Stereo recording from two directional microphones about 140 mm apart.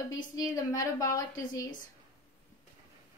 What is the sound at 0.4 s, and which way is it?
Speech, 25° left (ahead or behind).